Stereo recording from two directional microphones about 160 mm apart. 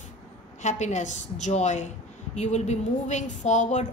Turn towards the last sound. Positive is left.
turn(degrees=50)  # may be behind; listen again after turning